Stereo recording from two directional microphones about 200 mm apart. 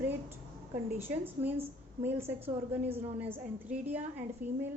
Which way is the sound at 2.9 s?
35° right (ahead or behind).